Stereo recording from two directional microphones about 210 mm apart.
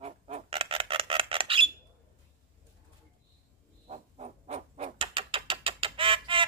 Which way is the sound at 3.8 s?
30° right (ahead or behind).